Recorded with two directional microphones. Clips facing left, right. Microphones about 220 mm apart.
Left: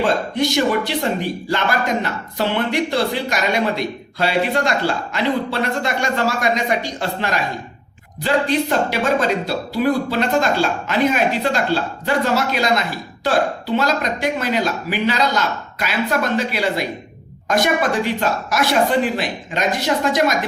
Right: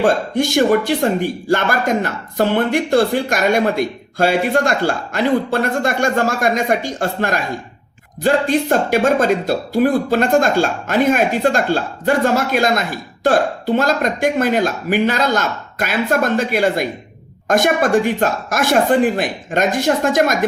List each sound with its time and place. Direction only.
0.0 s speech: 50° right (ahead or behind)